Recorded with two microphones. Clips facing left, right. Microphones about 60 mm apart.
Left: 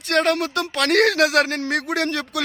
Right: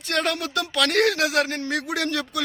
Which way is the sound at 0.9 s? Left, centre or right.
Left.